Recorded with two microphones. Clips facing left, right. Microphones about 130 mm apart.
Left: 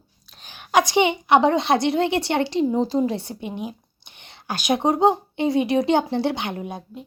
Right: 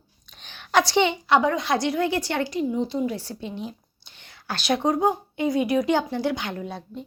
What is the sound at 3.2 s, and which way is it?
A woman's voice, 20° left (ahead or behind).